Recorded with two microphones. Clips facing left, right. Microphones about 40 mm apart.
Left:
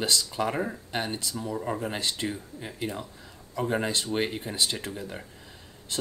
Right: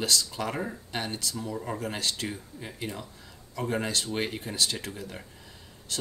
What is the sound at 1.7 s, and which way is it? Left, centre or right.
Speech, left.